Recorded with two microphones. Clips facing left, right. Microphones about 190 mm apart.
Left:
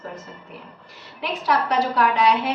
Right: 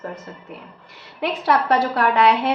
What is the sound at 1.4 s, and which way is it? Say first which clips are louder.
A woman's voice: right 2 dB; 55° right (ahead or behind).